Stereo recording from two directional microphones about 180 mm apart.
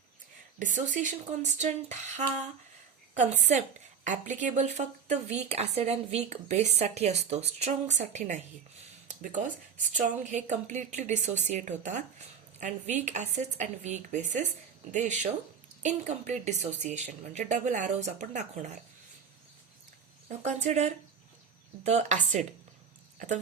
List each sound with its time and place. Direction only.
0.6 s a woman's voice: 45° right (ahead or behind)
20.2 s a woman's voice: 40° right (ahead or behind)